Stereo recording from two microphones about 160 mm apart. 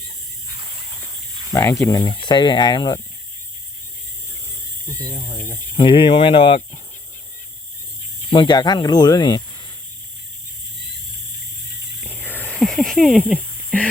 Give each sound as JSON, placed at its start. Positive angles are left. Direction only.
{"t": 0.6, "sound": "a sound", "side_deg": -25}
{"t": 1.8, "sound": "speech", "side_deg": 20}
{"t": 5.7, "sound": "speech", "side_deg": 30}
{"t": 8.3, "sound": "speech", "side_deg": 30}
{"t": 11.9, "sound": "snake", "side_deg": 10}